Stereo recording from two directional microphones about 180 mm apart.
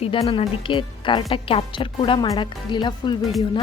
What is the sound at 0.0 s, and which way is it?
A woman's voice, 30° left (ahead or behind).